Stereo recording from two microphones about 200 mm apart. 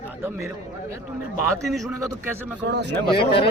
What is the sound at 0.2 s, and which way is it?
Speech, 15° right (ahead or behind).